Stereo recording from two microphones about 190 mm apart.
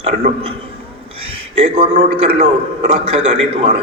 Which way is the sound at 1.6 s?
35° right (ahead or behind).